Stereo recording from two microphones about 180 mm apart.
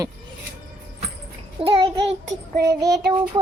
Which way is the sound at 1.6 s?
30° right (ahead or behind).